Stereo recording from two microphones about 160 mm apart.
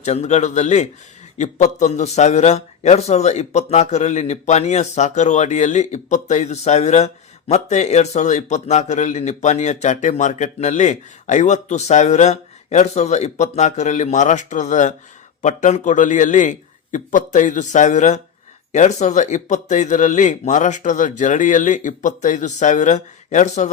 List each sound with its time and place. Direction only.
0.0 s a man's voice: 45° left (ahead or behind)